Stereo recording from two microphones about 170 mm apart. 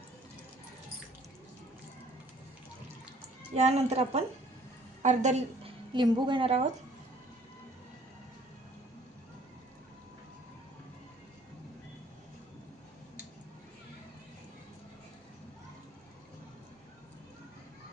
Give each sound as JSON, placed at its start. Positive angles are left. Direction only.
{"t": 3.5, "sound": "a woman's voice", "side_deg": -40}
{"t": 5.9, "sound": "a woman's voice", "side_deg": -25}